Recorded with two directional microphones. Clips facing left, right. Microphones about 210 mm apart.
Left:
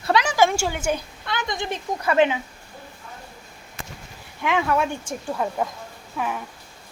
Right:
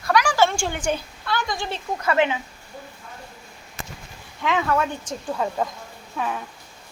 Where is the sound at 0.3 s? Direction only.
10° left (ahead or behind).